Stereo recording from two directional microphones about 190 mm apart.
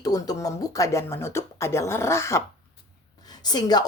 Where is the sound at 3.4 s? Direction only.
20° left (ahead or behind).